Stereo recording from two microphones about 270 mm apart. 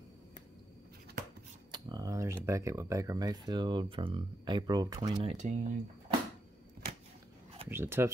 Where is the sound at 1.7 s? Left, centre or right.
Centre.